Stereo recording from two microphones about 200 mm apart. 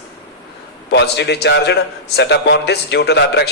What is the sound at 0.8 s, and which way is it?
A man's voice, 60° left (ahead or behind).